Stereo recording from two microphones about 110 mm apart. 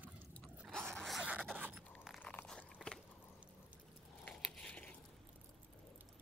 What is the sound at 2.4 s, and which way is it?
Biting, 20° left (ahead or behind).